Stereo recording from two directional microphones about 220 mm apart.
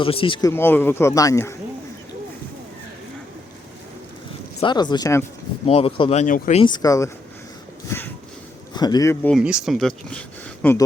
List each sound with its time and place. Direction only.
0.0 s speech: 25° left (ahead or behind)
0.5 s speech: 10° left (ahead or behind)
4.6 s speech: 20° left (ahead or behind)
5.6 s speech: 25° left (ahead or behind)
6.6 s speech: 20° left (ahead or behind)
9.3 s speech: 5° right (ahead or behind)